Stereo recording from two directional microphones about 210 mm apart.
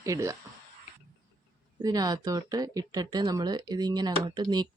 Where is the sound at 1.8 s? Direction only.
20° right (ahead or behind).